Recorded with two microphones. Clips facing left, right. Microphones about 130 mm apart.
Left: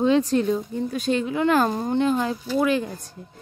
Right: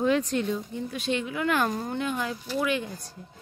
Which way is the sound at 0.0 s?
30° left (ahead or behind).